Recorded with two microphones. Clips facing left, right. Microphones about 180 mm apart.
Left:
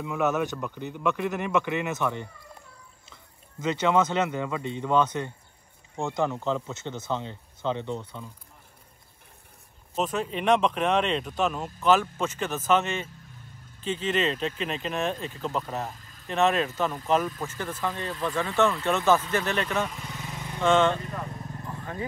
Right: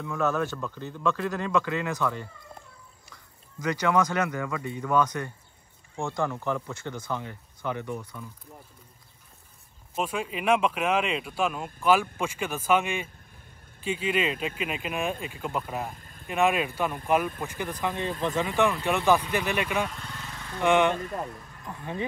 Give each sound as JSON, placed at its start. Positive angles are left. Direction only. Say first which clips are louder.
{"t": 0.0, "sound": "speech", "louder": "left 1 dB", "side_deg": 15}
{"t": 9.9, "sound": "speech", "louder": "left 2 dB", "side_deg": -10}
{"t": 16.0, "sound": "a sound", "louder": "right 3 dB", "side_deg": -50}
{"t": 16.3, "sound": "speech", "louder": "left 1 dB", "side_deg": -10}
{"t": 19.9, "sound": "vehicle", "louder": "left 2 dB", "side_deg": 5}
{"t": 20.6, "sound": "speech", "louder": "even", "side_deg": -15}
{"t": 21.6, "sound": "vehicle", "louder": "right 3 dB", "side_deg": -20}